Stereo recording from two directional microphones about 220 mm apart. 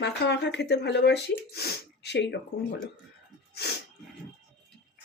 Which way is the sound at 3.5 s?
50° left (ahead or behind).